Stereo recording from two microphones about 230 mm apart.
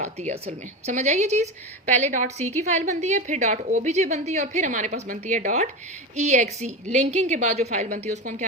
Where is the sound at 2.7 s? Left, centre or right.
Right.